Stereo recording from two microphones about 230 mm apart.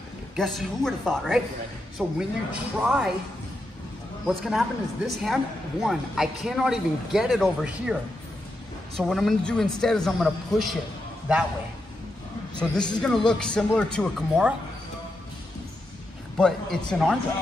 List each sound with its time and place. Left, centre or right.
0.4 s speech: centre
4.3 s speech: centre
12.5 s speech: centre
16.3 s speech: centre